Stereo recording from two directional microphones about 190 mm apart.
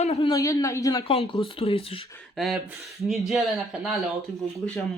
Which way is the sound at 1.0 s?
30° left (ahead or behind).